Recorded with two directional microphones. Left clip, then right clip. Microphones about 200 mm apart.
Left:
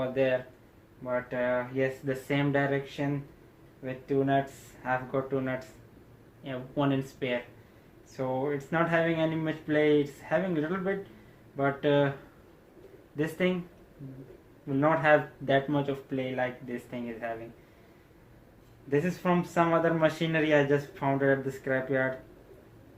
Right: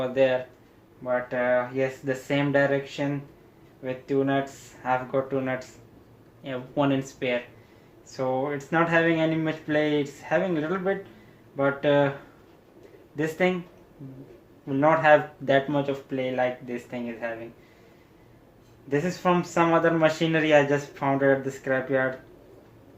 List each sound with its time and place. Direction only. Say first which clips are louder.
0.0 s speech: right 5 dB; 15° right (ahead or behind)
14.8 s speech: right 5 dB; 15° right (ahead or behind)
18.9 s speech: right 4 dB; 15° right (ahead or behind)